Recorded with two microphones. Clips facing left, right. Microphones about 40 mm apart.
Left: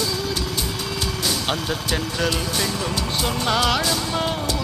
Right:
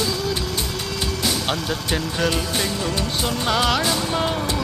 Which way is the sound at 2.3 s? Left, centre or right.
Centre.